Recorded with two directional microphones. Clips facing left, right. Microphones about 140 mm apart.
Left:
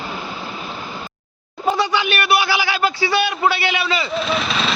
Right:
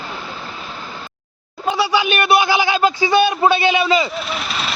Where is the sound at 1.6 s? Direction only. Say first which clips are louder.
Even; centre (ahead or behind).